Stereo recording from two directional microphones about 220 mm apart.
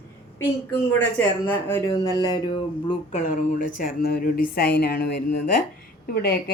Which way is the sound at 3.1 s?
35° left (ahead or behind).